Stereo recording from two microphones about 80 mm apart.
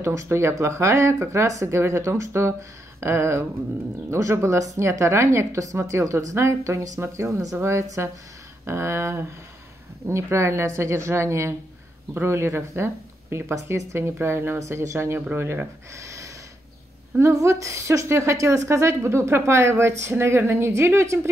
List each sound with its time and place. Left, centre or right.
0.0 s a woman's voice: right
15.9 s a sound: right
17.2 s a woman's voice: right